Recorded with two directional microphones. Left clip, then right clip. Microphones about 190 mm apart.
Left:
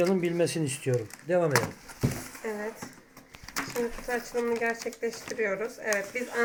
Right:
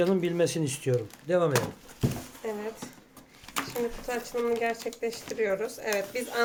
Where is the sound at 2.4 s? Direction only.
15° right (ahead or behind).